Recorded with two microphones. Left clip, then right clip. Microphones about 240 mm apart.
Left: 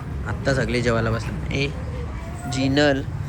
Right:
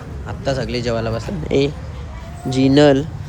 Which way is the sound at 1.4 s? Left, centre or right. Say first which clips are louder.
Right 10 dB; right.